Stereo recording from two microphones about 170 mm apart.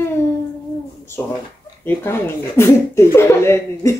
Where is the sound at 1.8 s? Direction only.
15° left (ahead or behind).